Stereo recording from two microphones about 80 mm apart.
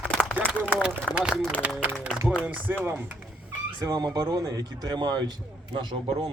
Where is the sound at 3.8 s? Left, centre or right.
Right.